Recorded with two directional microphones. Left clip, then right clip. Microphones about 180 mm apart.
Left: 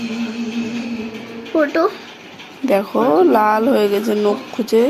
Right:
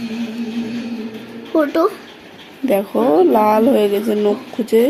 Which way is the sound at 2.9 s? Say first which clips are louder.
Right 1 dB; 5° right (ahead or behind).